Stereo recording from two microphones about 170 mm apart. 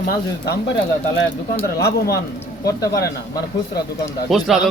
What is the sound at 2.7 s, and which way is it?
Speech, 20° left (ahead or behind).